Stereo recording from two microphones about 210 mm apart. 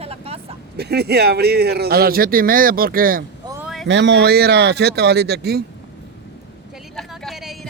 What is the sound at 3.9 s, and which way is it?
A man's voice, 55° right (ahead or behind).